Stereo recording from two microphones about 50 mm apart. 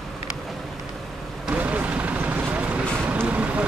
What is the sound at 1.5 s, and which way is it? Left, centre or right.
Vehicle, right.